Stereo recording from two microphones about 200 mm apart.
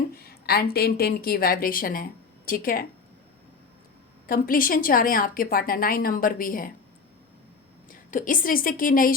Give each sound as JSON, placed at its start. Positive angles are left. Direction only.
{"t": 0.2, "sound": "a woman's voice", "side_deg": 50}
{"t": 4.3, "sound": "a woman's voice", "side_deg": 45}
{"t": 7.9, "sound": "a woman's voice", "side_deg": 40}